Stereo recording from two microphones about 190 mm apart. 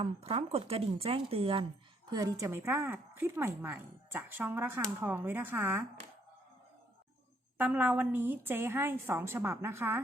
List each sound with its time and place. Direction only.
0.0 s a woman's voice: 30° right (ahead or behind); by 5.8 s 10° right (ahead or behind)
7.6 s a woman's voice: 10° right (ahead or behind)